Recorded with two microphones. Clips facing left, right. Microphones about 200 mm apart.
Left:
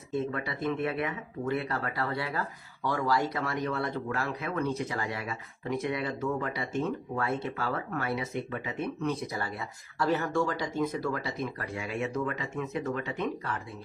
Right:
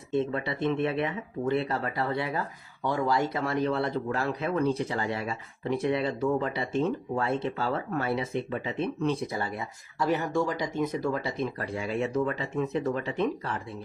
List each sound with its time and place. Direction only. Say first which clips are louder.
0.1 s speech: right 4 dB; 30° right (ahead or behind)